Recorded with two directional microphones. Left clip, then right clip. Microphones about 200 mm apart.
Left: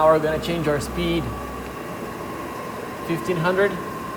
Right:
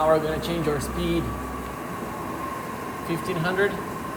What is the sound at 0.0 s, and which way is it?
Speech, 30° left (ahead or behind).